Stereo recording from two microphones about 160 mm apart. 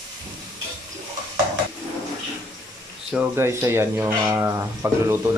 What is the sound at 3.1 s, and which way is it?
Speech, 10° right (ahead or behind).